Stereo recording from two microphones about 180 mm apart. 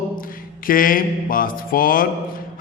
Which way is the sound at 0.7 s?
50° left (ahead or behind).